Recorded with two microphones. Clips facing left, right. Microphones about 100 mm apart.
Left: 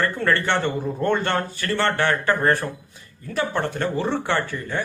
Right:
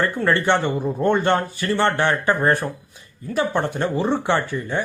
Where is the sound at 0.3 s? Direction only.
20° right (ahead or behind).